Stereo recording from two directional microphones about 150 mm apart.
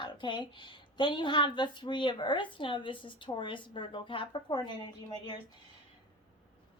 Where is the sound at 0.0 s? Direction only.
30° left (ahead or behind).